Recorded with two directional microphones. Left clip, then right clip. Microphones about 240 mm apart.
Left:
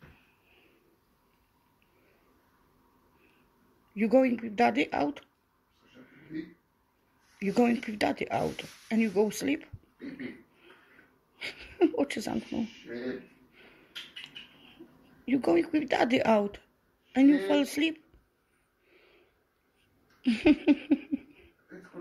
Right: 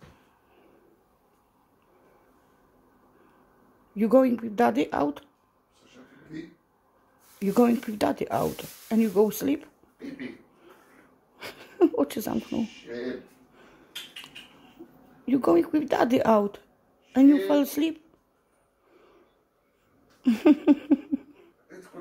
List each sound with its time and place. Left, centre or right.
3.9 s speech: centre
7.4 s speech: centre
11.4 s speech: centre
15.2 s speech: centre
20.2 s a sound: centre